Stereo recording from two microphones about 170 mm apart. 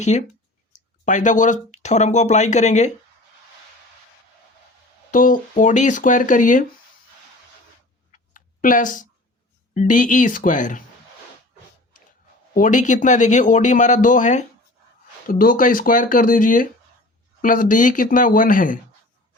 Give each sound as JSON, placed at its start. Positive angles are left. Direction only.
{"t": 0.0, "sound": "speech", "side_deg": 45}
{"t": 5.1, "sound": "speech", "side_deg": 50}
{"t": 8.1, "sound": "a sound", "side_deg": 50}
{"t": 9.7, "sound": "speech", "side_deg": 50}
{"t": 12.5, "sound": "speech", "side_deg": 50}